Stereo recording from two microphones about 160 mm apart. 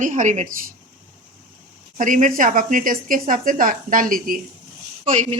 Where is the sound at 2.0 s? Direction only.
55° right (ahead or behind).